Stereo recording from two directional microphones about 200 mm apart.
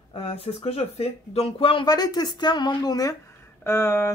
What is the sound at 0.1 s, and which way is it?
Speech, 30° left (ahead or behind).